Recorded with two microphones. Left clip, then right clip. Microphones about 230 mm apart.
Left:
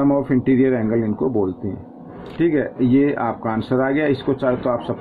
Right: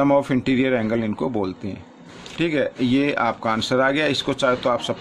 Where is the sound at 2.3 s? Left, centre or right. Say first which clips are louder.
Left 2 dB; right.